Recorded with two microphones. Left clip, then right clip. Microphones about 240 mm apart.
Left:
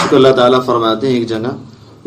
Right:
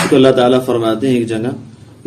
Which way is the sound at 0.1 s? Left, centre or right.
Right.